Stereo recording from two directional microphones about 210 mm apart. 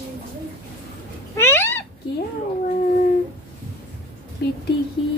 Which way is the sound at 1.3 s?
10° left (ahead or behind).